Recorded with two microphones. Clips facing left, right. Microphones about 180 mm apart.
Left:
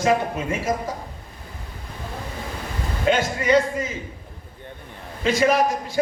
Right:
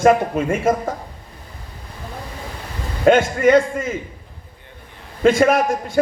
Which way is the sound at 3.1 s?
50° right (ahead or behind).